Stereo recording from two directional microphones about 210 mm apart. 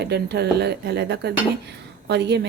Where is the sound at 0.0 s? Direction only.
50° right (ahead or behind).